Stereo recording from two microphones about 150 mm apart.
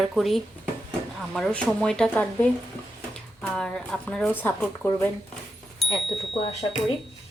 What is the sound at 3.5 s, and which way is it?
Speech, 5° left (ahead or behind).